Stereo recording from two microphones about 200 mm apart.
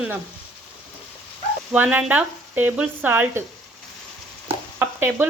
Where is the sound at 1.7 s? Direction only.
10° right (ahead or behind).